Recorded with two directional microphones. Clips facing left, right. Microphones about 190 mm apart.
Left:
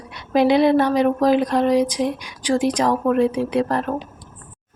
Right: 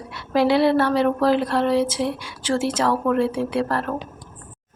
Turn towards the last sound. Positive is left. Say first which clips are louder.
# left 3 dB
turn(degrees=15)  # may be behind; listen again after turning